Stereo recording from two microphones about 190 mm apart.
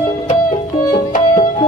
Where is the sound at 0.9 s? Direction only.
40° left (ahead or behind).